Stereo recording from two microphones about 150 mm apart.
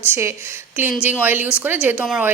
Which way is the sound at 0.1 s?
20° right (ahead or behind).